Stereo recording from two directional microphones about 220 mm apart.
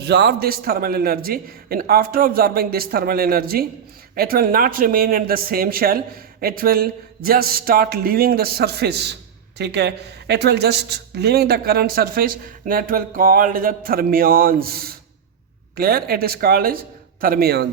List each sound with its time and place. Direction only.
0.0 s a woman's voice: 50° right (ahead or behind)